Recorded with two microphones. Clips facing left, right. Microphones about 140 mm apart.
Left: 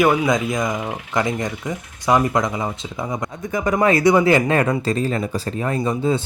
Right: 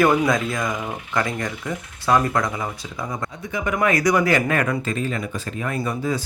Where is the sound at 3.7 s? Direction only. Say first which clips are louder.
Left 4 dB; 30° left (ahead or behind).